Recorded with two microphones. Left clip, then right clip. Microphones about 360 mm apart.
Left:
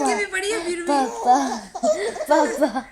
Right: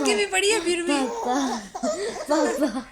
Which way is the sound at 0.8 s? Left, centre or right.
Centre.